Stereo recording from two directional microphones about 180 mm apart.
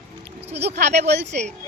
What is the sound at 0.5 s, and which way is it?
Speech, 35° right (ahead or behind).